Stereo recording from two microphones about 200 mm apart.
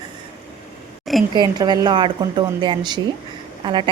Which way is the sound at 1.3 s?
20° right (ahead or behind).